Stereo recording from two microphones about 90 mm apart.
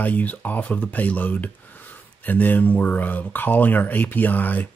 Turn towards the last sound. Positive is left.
turn(degrees=20)  # may be behind; listen again after turning